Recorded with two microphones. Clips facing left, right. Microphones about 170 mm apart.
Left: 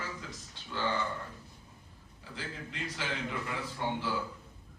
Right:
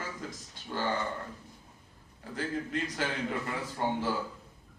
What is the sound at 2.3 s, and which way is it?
A man's voice, 50° right (ahead or behind).